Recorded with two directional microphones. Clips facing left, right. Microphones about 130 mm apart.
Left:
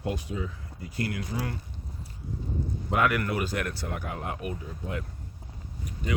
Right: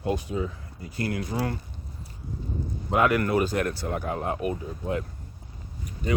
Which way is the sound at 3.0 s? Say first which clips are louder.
Right 5 dB; 30° right (ahead or behind).